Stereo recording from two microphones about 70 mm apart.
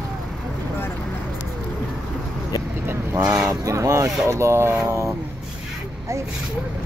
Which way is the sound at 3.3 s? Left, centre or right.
Right.